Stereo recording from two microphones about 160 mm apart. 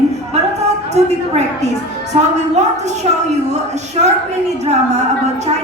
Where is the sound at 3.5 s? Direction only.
45° right (ahead or behind).